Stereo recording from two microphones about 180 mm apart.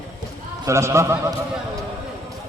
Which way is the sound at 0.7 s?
15° right (ahead or behind).